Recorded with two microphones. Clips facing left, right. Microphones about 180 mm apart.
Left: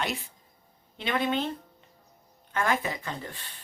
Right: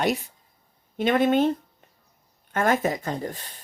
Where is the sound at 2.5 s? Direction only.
45° right (ahead or behind).